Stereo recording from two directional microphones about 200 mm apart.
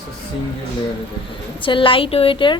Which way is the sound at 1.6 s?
25° left (ahead or behind).